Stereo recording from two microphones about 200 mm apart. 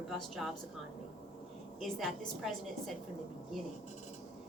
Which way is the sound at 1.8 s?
Centre (ahead or behind).